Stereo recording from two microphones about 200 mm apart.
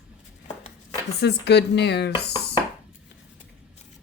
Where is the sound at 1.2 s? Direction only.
55° left (ahead or behind).